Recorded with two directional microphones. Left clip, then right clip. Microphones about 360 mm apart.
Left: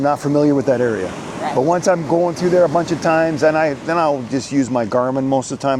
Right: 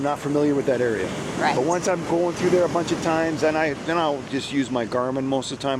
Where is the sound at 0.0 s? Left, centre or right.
Left.